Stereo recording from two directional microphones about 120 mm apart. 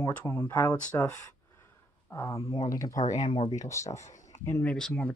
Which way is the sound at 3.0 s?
90° left.